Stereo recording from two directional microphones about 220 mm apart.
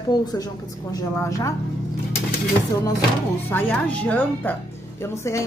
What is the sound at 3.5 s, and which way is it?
A woman's voice, 10° left (ahead or behind).